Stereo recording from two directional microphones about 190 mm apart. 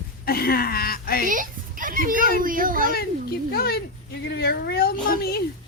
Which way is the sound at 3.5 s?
55° left (ahead or behind).